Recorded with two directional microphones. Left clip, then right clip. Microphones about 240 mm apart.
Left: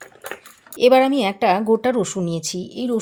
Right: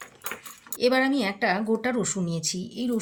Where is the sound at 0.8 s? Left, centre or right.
Left.